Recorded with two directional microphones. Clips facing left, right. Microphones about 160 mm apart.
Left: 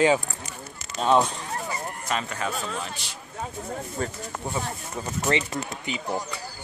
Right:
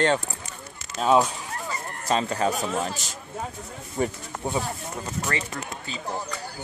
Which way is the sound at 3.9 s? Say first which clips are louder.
Right 9 dB; 15° right (ahead or behind).